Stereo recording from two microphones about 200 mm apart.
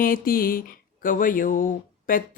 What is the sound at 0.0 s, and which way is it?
Speech, 45° left (ahead or behind).